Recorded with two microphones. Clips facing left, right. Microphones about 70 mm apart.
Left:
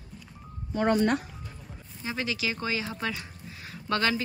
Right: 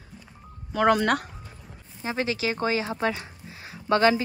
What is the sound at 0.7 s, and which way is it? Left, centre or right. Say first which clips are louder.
Speech: right 3 dB; right.